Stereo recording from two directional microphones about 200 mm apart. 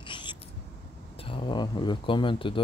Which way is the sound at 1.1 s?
25° left (ahead or behind).